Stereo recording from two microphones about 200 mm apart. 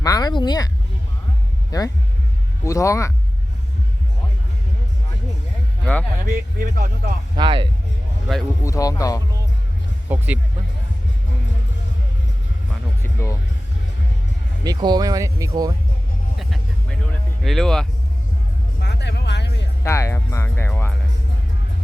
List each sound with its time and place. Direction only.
0.0 s a sound: 20° left (ahead or behind)
1.7 s speech: 20° left (ahead or behind)
5.8 s speech: 5° left (ahead or behind)
6.2 s speech: 45° right (ahead or behind)
7.3 s speech: 25° right (ahead or behind)
8.6 s speech: 15° left (ahead or behind)
10.1 s speech: 10° right (ahead or behind)
13.1 s speech: 15° left (ahead or behind)
14.6 s speech: 20° right (ahead or behind)
16.4 s music: centre (ahead or behind)
17.4 s speech: centre (ahead or behind)
18.8 s music: 55° left (ahead or behind)
19.8 s speech: 15° left (ahead or behind)